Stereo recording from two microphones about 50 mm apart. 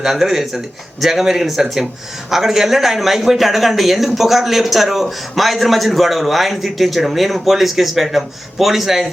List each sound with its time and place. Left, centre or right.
0.0 s speech: centre